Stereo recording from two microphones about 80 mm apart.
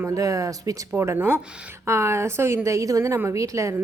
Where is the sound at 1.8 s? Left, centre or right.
Right.